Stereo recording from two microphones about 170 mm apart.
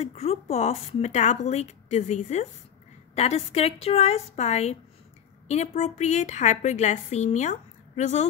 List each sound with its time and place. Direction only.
0.0 s a woman's voice: 40° left (ahead or behind)